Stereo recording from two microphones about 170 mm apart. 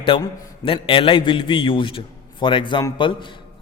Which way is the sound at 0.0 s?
30° left (ahead or behind).